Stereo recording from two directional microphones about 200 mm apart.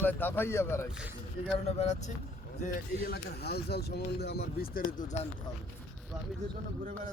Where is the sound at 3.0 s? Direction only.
50° left (ahead or behind).